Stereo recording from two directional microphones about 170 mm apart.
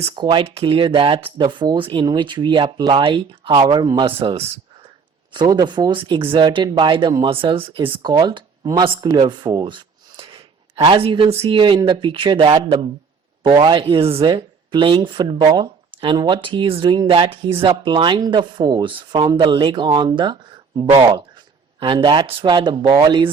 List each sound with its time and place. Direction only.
0.0 s speech: 30° right (ahead or behind)